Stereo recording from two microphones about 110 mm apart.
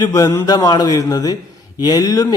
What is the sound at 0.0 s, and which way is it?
Speech, 35° left (ahead or behind).